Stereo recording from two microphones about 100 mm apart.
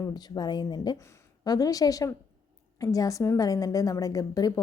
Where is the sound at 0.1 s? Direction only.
45° left (ahead or behind).